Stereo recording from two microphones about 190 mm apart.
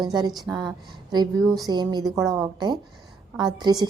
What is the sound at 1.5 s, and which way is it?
A woman's voice, 20° right (ahead or behind).